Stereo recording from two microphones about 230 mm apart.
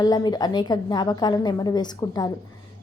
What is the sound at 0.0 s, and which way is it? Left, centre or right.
A woman's voice, centre.